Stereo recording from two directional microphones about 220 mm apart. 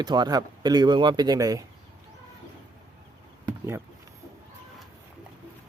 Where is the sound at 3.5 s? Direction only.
10° right (ahead or behind).